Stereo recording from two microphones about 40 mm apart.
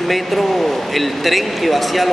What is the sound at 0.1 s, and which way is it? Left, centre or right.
A man's voice, centre.